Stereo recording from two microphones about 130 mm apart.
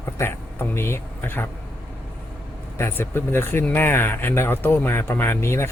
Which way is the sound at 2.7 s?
20° left (ahead or behind).